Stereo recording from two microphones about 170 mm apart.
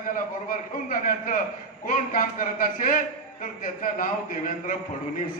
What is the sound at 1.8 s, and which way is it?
A man's voice, 50° left (ahead or behind).